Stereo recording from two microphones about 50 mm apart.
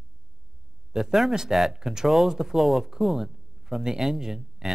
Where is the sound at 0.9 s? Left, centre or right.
Centre.